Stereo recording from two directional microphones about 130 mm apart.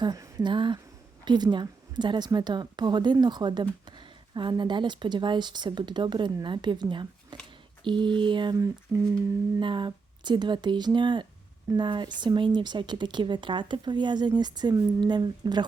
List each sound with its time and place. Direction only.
0.0 s a woman's voice: 30° right (ahead or behind)
8.9 s humming: centre (ahead or behind)
9.6 s a woman's voice: 40° right (ahead or behind)